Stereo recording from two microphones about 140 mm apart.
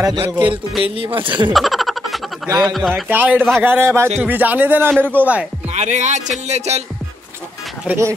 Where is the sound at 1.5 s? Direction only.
Centre (ahead or behind).